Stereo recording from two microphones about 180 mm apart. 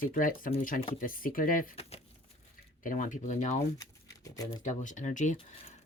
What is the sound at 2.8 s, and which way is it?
Speech, 45° left (ahead or behind).